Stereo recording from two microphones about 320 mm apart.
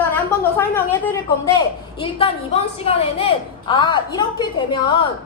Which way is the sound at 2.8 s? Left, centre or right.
Centre.